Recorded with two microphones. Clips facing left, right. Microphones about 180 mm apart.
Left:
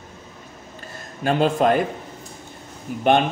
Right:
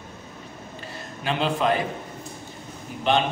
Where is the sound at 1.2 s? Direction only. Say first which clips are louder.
Left 6 dB; 45° left (ahead or behind).